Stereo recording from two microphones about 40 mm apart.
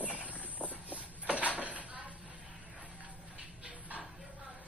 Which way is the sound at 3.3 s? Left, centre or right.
Right.